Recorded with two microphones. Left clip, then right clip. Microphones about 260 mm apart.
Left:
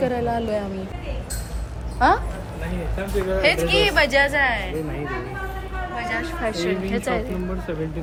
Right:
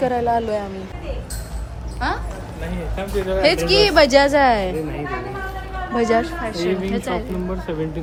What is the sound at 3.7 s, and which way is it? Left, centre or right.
A woman's voice, right.